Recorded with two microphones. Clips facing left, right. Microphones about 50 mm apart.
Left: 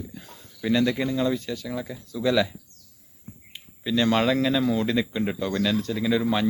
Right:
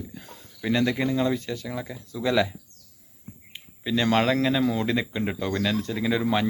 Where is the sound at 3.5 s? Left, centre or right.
Right.